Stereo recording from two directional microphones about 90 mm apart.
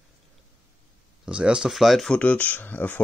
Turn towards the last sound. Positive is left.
turn(degrees=20)  # may be behind; listen again after turning